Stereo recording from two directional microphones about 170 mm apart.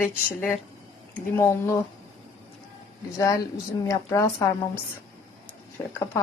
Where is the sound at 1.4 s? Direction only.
15° left (ahead or behind).